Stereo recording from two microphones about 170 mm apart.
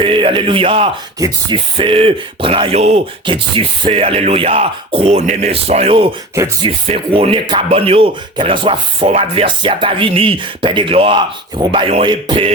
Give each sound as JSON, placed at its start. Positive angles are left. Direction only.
{"t": 0.0, "sound": "speech", "side_deg": -30}
{"t": 6.3, "sound": "speech", "side_deg": -20}
{"t": 6.7, "sound": "speech", "side_deg": -30}